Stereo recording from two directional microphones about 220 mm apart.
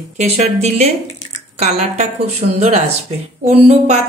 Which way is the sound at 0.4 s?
30° right (ahead or behind).